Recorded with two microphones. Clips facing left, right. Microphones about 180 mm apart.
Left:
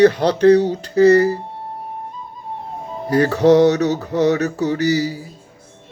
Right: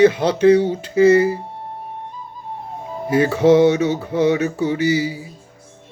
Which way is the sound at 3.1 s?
10° right (ahead or behind).